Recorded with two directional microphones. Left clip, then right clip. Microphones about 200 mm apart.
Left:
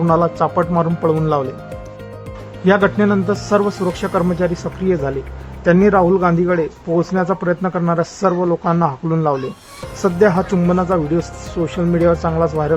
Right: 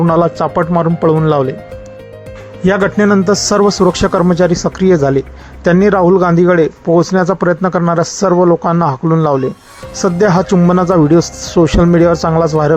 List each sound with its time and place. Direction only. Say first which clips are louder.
0.1 s speech: right 1 dB; 20° right (ahead or behind)
2.6 s speech: right 3 dB; 30° right (ahead or behind)